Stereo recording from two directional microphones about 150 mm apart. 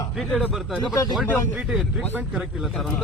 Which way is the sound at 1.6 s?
5° right (ahead or behind).